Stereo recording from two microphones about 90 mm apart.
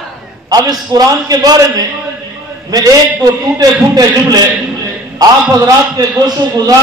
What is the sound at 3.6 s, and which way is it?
Speech, 40° right (ahead or behind).